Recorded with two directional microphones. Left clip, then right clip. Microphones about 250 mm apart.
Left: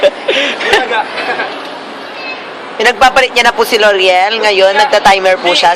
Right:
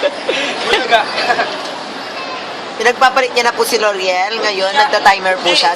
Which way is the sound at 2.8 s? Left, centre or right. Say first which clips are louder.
Left 4 dB; left.